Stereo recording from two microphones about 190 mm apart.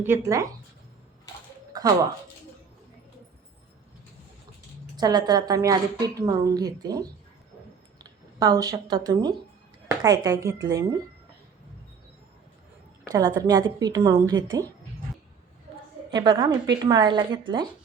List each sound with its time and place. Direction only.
0.0 s speech: 15° right (ahead or behind)
4.9 s a woman's voice: 20° right (ahead or behind)
13.1 s a woman's voice: 15° right (ahead or behind)
16.1 s a woman's voice: 20° right (ahead or behind)